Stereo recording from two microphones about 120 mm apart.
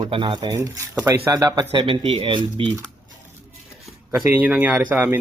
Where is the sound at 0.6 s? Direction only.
25° right (ahead or behind); by 2.7 s 45° right (ahead or behind).